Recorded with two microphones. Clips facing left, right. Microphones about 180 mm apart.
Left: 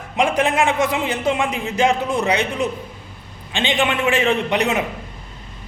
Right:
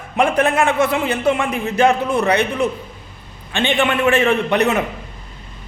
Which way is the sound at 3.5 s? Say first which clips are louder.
Right 2 dB; 15° left (ahead or behind).